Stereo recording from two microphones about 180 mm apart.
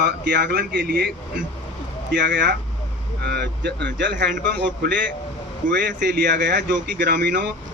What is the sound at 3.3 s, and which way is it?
Speech, 70° right (ahead or behind).